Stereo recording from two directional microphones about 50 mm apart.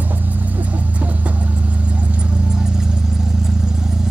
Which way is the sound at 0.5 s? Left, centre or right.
Right.